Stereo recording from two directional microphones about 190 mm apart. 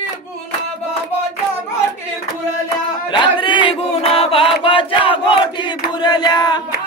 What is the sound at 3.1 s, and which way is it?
Battle cry, 25° left (ahead or behind).